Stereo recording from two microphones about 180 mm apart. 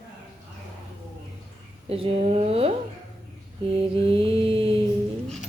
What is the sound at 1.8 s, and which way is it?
Speech, 30° right (ahead or behind).